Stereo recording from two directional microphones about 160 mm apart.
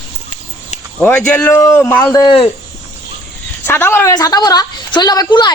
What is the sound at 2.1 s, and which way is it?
Speech, 25° left (ahead or behind).